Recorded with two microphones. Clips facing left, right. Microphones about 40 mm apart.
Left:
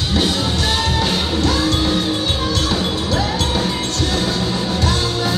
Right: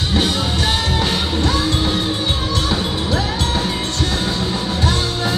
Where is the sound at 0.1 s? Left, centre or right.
Right.